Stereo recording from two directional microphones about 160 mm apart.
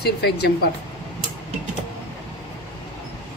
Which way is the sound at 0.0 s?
90° left.